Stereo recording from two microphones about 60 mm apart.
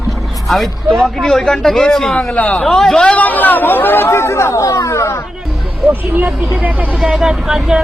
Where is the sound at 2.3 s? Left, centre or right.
Left.